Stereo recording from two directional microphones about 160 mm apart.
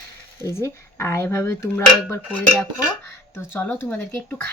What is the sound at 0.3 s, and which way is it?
Speech, 15° left (ahead or behind).